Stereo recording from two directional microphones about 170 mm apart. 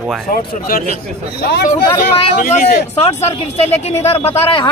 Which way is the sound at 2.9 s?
40° left (ahead or behind).